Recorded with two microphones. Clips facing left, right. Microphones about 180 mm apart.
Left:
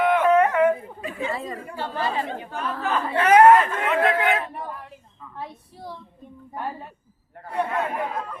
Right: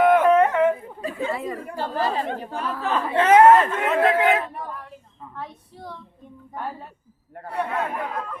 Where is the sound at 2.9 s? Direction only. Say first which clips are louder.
Right 1 dB; 25° right (ahead or behind).